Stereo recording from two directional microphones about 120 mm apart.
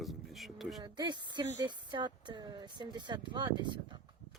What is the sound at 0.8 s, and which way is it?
Speech, 40° right (ahead or behind).